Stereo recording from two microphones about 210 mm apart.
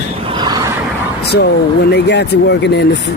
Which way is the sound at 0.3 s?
20° right (ahead or behind).